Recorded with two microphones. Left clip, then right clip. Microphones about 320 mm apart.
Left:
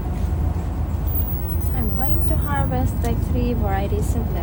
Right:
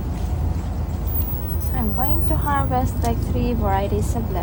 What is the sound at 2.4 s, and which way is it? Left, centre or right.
Vehicle, centre.